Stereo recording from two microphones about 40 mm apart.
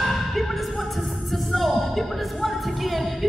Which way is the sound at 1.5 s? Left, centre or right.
Centre.